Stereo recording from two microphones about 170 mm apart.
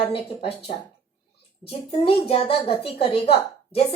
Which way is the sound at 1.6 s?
35° left (ahead or behind).